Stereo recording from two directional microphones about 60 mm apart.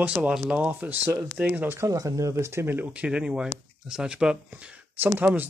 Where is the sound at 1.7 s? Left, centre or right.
Right.